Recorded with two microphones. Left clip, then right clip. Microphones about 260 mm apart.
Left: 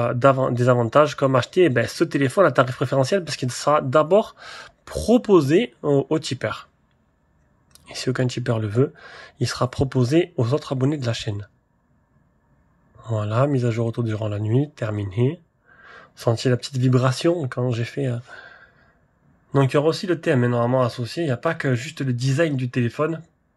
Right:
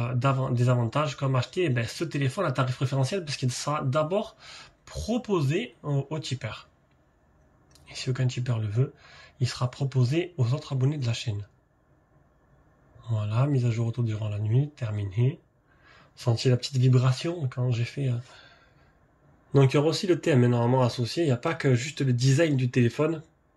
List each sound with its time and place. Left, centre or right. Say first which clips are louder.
0.0 s speech: left 11 dB; centre
7.7 s speech: left 9 dB; centre
13.2 s speech: left 9 dB; centre